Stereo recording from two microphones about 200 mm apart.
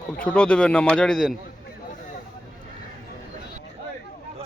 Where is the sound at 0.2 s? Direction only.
5° left (ahead or behind).